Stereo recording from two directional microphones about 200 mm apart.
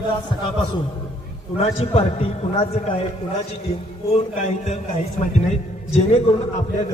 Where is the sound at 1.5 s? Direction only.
30° left (ahead or behind).